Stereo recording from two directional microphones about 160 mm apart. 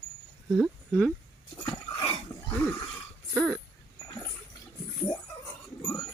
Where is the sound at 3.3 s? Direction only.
Centre (ahead or behind).